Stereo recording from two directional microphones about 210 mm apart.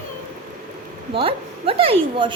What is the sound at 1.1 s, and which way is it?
A woman's voice, 25° right (ahead or behind).